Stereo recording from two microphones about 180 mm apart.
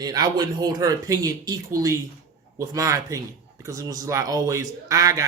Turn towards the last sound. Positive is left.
turn(degrees=-20)  # may be behind; listen again after turning